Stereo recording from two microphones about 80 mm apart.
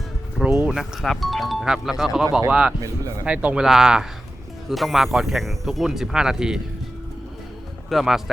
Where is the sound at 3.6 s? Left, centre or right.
Centre.